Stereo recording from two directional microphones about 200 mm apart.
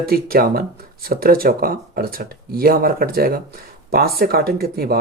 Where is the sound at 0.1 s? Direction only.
50° right (ahead or behind).